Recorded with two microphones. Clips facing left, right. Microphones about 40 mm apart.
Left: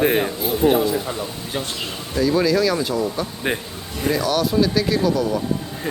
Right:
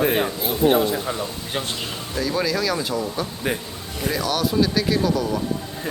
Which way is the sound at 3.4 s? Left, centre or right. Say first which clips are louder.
Left 2 dB; left.